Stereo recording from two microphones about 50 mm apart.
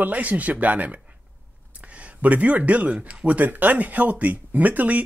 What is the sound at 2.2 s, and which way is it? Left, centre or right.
Speech, right.